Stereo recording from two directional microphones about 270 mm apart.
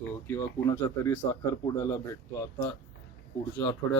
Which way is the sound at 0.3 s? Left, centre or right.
Centre.